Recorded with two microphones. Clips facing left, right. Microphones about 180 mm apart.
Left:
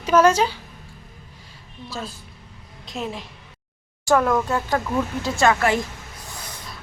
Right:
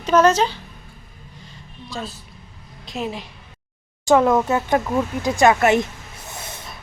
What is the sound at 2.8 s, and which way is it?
Speech, centre (ahead or behind).